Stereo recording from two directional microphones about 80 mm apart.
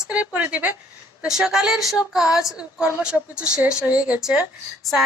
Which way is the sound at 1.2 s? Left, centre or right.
Centre.